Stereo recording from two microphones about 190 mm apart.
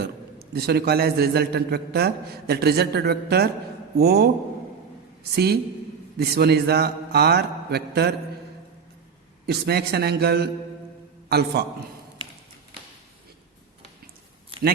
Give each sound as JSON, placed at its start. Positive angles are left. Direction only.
{"t": 0.0, "sound": "a man's voice", "side_deg": -55}
{"t": 5.3, "sound": "a man's voice", "side_deg": -55}
{"t": 9.5, "sound": "a man's voice", "side_deg": -60}
{"t": 14.5, "sound": "a sound", "side_deg": -30}